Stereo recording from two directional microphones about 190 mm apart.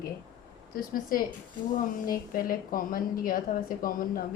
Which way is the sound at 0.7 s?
50° left (ahead or behind).